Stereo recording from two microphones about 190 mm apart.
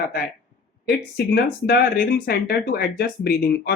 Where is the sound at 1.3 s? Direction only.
55° left (ahead or behind).